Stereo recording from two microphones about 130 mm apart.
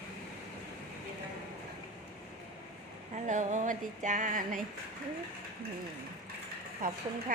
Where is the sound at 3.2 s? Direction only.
70° right (ahead or behind); by 4.6 s 90° right.